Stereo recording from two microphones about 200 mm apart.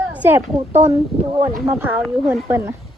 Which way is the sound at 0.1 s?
10° right (ahead or behind).